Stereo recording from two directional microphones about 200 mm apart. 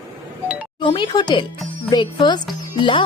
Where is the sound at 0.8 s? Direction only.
25° left (ahead or behind).